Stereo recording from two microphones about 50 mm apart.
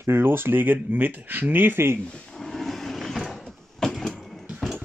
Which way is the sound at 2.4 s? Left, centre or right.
Centre.